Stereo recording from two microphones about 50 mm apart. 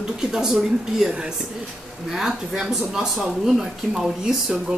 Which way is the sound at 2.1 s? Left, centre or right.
Centre.